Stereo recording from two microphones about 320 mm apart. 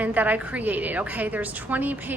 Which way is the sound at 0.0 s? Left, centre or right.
Centre.